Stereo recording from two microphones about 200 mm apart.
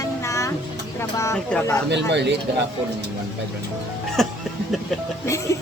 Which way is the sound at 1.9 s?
60° right (ahead or behind).